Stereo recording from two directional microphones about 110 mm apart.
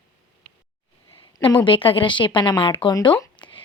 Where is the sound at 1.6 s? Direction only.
55° left (ahead or behind).